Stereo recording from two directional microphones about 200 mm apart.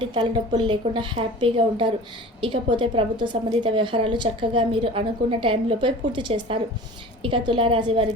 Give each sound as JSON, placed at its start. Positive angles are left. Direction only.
{"t": 0.0, "sound": "a woman's voice", "side_deg": -25}